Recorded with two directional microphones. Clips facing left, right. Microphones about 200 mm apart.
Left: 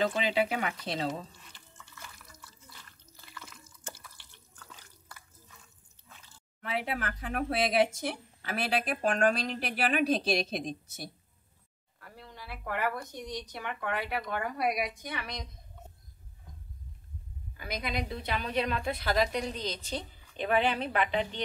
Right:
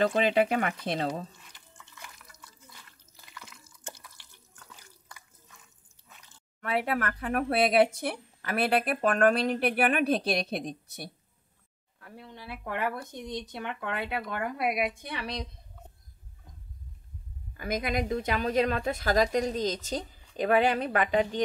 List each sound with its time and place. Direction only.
0.0 s a woman's voice: 55° right (ahead or behind)
1.5 s a sound: 15° right (ahead or behind)
6.6 s speech: 55° right (ahead or behind)
12.0 s speech: 20° right (ahead or behind)
17.6 s a woman's voice: 50° right (ahead or behind)